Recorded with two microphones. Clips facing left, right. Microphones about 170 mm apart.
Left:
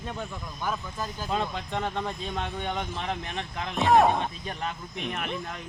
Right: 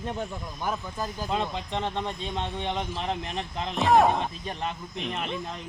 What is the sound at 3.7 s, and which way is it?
Speech, centre (ahead or behind).